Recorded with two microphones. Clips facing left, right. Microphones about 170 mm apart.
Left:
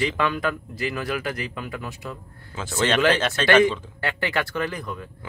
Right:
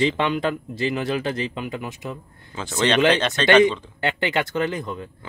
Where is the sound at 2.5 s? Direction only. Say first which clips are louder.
Right 2 dB; 5° left (ahead or behind).